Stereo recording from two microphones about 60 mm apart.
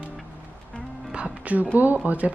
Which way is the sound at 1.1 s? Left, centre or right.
Right.